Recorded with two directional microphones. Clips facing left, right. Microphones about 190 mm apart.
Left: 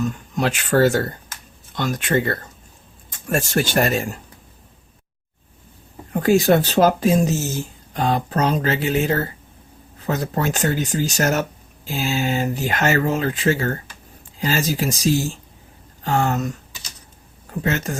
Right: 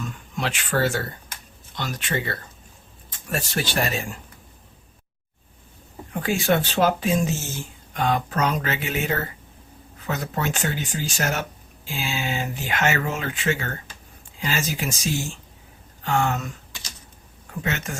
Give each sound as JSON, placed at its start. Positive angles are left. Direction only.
{"t": 0.0, "sound": "speech", "side_deg": 40}
{"t": 6.1, "sound": "speech", "side_deg": 40}